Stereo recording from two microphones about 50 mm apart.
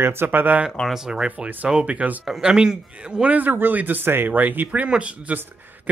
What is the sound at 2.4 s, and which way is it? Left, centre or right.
Speech, centre.